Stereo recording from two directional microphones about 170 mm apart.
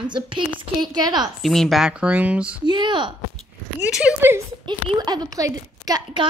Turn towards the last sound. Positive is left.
turn(degrees=-25)  # may be behind; listen again after turning